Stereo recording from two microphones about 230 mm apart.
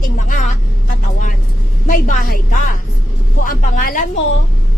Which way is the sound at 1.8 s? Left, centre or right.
Left.